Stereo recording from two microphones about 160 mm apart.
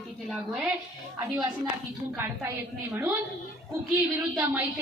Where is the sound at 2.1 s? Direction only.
15° right (ahead or behind).